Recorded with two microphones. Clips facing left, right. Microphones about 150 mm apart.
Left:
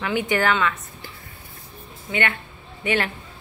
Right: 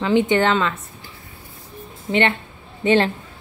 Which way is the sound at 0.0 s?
25° right (ahead or behind).